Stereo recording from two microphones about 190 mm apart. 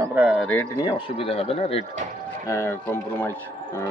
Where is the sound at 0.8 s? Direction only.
25° left (ahead or behind).